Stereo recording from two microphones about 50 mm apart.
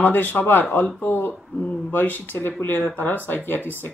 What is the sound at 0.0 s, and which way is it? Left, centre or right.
Speech, left.